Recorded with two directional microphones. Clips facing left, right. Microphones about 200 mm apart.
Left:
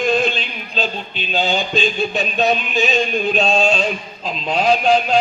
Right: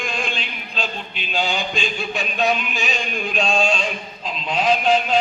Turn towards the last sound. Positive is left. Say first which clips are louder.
# left 3 dB
turn(degrees=45)  # may be behind; listen again after turning